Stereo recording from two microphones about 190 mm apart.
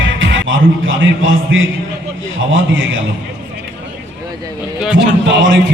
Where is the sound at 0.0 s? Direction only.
80° right.